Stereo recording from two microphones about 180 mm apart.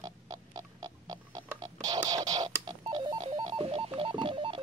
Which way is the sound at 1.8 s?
20° right (ahead or behind).